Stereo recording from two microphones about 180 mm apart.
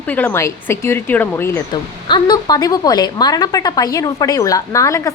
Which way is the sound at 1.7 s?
25° left (ahead or behind).